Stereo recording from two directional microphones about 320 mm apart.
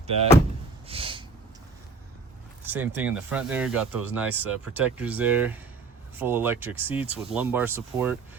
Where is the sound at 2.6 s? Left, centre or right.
Centre.